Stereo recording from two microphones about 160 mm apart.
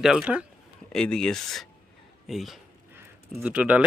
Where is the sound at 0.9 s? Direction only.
5° left (ahead or behind).